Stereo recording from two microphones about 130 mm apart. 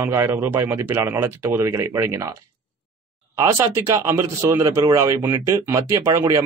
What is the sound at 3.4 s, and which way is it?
A man's voice, 20° right (ahead or behind).